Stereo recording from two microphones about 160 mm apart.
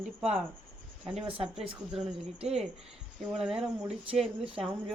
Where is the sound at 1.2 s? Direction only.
35° right (ahead or behind).